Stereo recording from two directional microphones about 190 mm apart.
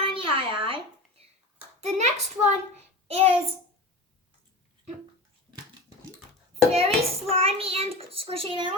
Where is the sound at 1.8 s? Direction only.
35° right (ahead or behind).